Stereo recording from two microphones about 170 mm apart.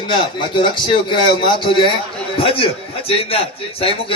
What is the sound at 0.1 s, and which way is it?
A man's voice, 30° left (ahead or behind).